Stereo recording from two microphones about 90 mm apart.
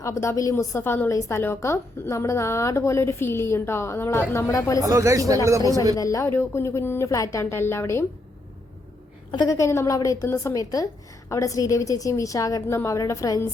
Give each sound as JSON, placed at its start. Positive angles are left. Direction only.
{"t": 0.0, "sound": "a woman's voice", "side_deg": 35}
{"t": 4.8, "sound": "speech", "side_deg": -35}
{"t": 6.0, "sound": "a woman's voice", "side_deg": 40}
{"t": 9.5, "sound": "a woman's voice", "side_deg": 35}